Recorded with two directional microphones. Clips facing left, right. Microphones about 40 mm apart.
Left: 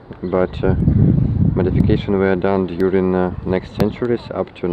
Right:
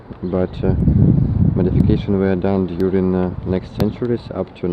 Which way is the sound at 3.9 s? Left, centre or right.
Left.